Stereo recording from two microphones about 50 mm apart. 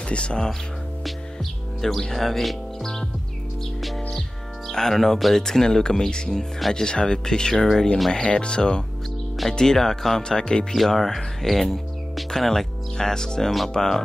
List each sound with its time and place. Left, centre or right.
0.0 s speech: left
1.0 s music: centre
4.6 s speech: centre
10.7 s speech: centre